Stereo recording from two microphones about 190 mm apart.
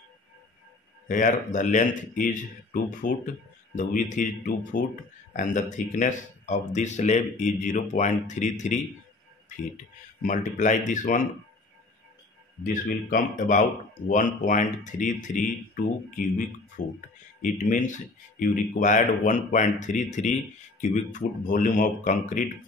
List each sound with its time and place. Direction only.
1.0 s speech: 45° left (ahead or behind)
10.2 s speech: 40° left (ahead or behind)
12.6 s speech: 50° left (ahead or behind)